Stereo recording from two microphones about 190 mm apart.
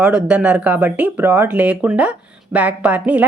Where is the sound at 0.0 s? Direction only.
5° right (ahead or behind).